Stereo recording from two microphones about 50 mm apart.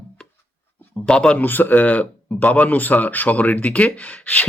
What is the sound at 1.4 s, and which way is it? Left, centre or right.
Speech, left.